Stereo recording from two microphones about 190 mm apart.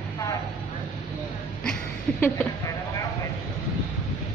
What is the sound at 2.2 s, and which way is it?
Speech, 10° left (ahead or behind).